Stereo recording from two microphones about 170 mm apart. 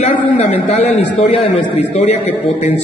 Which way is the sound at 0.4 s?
35° left (ahead or behind).